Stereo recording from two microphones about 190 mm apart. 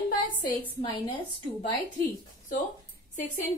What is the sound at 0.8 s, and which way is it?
Speech, 25° left (ahead or behind).